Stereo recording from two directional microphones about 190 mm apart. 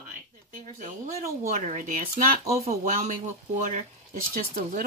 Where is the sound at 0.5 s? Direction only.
45° right (ahead or behind).